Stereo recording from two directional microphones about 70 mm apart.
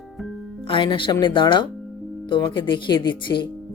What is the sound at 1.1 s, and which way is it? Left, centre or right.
Speech, left.